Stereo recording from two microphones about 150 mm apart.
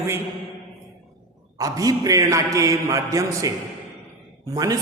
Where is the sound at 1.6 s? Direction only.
25° right (ahead or behind).